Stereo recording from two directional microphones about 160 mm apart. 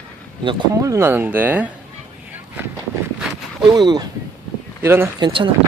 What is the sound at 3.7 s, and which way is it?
Speech, 25° right (ahead or behind).